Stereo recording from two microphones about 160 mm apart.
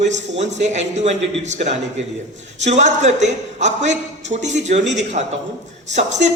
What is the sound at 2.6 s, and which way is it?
A woman's voice, 45° right (ahead or behind).